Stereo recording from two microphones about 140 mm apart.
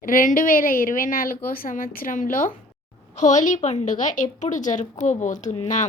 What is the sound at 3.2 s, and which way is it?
A woman's voice, 60° left (ahead or behind).